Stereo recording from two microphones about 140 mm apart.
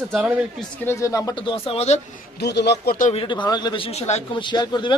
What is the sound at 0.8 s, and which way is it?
Speech, 20° left (ahead or behind).